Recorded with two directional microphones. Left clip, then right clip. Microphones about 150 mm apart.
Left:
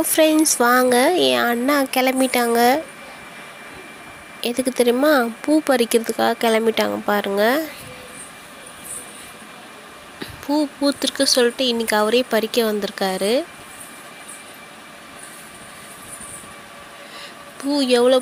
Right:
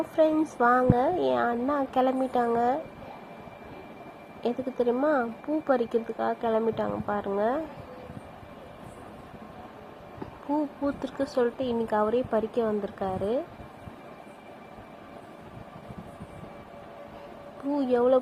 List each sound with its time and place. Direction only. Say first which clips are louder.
0.6 s speech: left 6 dB; 65° left (ahead or behind)
1.2 s speech: left 8 dB; 55° left (ahead or behind)
4.4 s speech: left 9 dB; 55° left (ahead or behind)
10.5 s speech: left 9 dB; 50° left (ahead or behind)
17.7 s speech: left 8 dB; 50° left (ahead or behind)